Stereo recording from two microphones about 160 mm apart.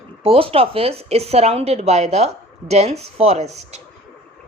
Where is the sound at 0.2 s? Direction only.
35° right (ahead or behind).